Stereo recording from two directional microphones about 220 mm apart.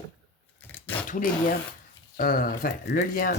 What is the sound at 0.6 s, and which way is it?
Speech, 10° left (ahead or behind).